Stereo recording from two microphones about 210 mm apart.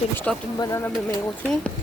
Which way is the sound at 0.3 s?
5° left (ahead or behind).